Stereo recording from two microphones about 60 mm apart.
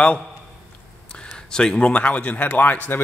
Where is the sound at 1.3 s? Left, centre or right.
Centre; by 3.0 s left.